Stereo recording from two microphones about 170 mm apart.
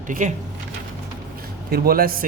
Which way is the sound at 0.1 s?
45° right (ahead or behind).